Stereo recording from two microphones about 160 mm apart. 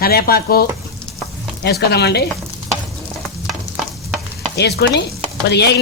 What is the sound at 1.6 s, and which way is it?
Speech, 85° left.